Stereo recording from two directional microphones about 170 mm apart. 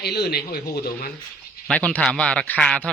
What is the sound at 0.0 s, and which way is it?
Speech, 75° left (ahead or behind).